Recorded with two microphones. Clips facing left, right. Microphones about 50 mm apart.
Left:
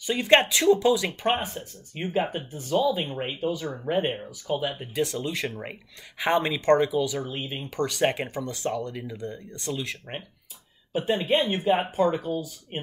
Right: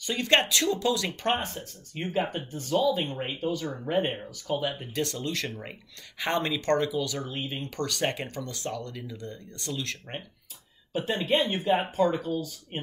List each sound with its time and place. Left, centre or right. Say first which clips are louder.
0.0 s speech: left 4 dB; centre